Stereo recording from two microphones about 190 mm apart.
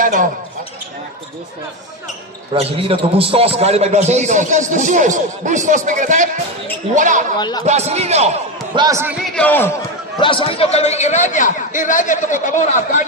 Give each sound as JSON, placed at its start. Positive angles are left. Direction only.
{"t": 0.0, "sound": "speech", "side_deg": -45}
{"t": 2.5, "sound": "a man's voice", "side_deg": -30}
{"t": 7.3, "sound": "speech", "side_deg": 20}
{"t": 7.6, "sound": "a man's voice", "side_deg": -35}
{"t": 8.7, "sound": "a man's voice", "side_deg": -20}
{"t": 9.3, "sound": "speech", "side_deg": 10}
{"t": 10.2, "sound": "a man's voice", "side_deg": 25}